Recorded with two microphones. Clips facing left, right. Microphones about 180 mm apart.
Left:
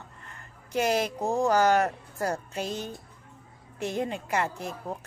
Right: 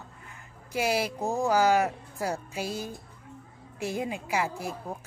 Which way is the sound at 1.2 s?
15° left (ahead or behind).